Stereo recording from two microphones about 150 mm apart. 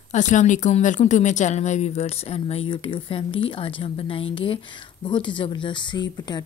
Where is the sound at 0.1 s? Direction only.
55° left (ahead or behind).